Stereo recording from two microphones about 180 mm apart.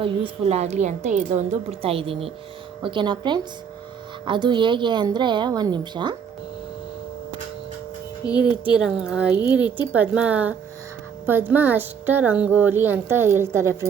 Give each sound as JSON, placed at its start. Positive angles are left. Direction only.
{"t": 0.0, "sound": "a woman's voice", "side_deg": -30}
{"t": 8.3, "sound": "a woman's voice", "side_deg": -5}